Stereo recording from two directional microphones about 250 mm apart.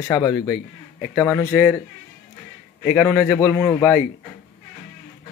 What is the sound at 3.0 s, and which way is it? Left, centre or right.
Speech, centre.